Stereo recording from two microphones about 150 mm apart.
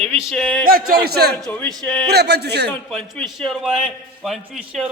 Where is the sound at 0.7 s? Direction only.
75° right (ahead or behind).